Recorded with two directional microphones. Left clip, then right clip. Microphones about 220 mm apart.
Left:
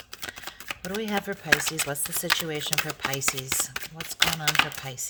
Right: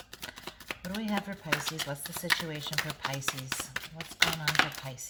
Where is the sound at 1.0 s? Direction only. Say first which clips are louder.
Left 5 dB; 55° left (ahead or behind).